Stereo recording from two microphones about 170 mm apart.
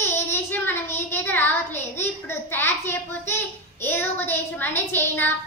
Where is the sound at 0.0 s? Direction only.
15° left (ahead or behind).